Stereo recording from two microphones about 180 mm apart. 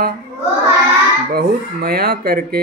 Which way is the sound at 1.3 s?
60° right (ahead or behind).